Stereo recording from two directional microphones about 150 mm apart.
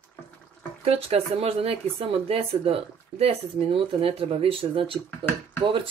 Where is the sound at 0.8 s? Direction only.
40° right (ahead or behind).